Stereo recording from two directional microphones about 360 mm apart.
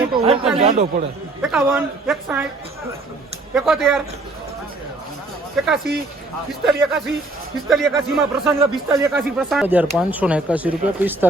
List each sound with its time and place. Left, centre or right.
0.1 s a man's voice: centre
1.4 s speech: centre
3.5 s speech: centre
5.6 s speech: centre